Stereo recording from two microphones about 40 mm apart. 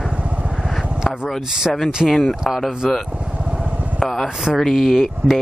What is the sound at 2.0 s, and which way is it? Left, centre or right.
Speech, left.